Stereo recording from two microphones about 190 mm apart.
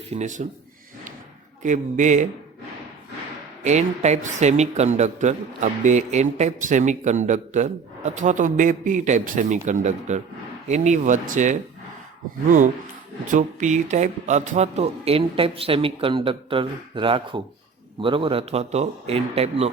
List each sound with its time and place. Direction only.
0.1 s a man's voice: 40° right (ahead or behind)
1.6 s a man's voice: 40° right (ahead or behind)
3.6 s a man's voice: 35° right (ahead or behind)